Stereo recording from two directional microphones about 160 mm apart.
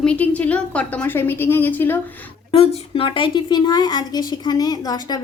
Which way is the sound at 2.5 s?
35° left (ahead or behind).